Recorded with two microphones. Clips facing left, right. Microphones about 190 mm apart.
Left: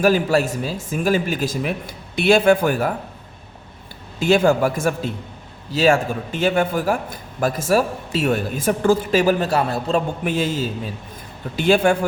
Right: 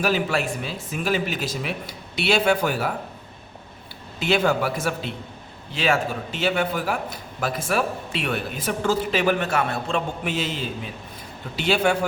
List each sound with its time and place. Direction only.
0.0 s a man's voice: 45° left (ahead or behind)
4.2 s a man's voice: 45° left (ahead or behind)